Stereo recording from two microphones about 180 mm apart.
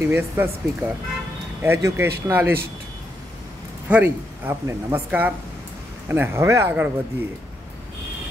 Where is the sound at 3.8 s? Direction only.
10° right (ahead or behind).